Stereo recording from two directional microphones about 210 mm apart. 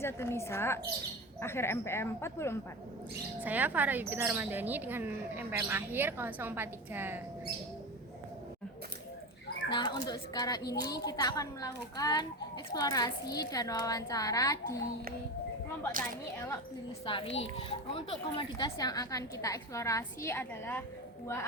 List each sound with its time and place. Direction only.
0.0 s a child's voice: 10° left (ahead or behind)
3.4 s speech: 10° right (ahead or behind)
9.7 s a child's voice: 20° left (ahead or behind)
15.9 s speech: 40° right (ahead or behind)
17.1 s a child's voice: 25° left (ahead or behind); by 20.8 s 10° left (ahead or behind)